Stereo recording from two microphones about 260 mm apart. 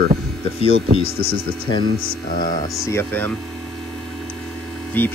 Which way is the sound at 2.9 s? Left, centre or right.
Centre.